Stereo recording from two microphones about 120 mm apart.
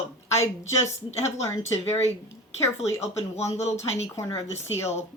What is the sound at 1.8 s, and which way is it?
A woman's voice, 60° left (ahead or behind).